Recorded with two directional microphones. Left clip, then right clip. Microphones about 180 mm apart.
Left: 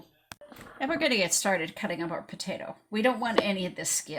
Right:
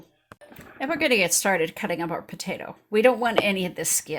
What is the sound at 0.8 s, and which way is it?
Speech, 25° right (ahead or behind).